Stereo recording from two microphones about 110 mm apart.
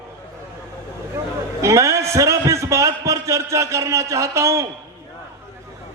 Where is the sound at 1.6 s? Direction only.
25° right (ahead or behind).